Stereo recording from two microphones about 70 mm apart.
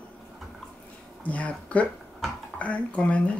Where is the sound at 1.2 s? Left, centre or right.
Centre.